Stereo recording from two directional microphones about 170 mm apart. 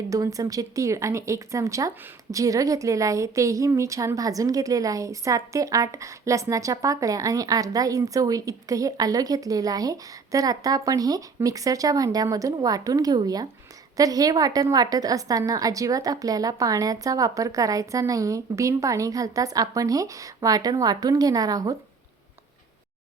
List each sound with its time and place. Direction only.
0.1 s a woman's voice: 20° right (ahead or behind)